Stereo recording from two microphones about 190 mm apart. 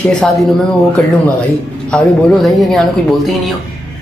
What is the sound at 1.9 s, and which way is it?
Speech, centre (ahead or behind).